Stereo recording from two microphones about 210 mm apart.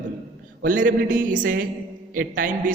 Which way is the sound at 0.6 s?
40° right (ahead or behind).